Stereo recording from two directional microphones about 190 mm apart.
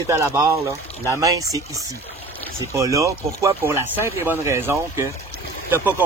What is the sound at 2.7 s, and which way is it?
Speech, 15° right (ahead or behind).